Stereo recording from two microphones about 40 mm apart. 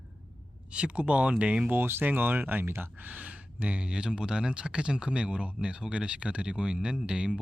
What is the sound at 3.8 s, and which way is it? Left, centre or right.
Speech, right.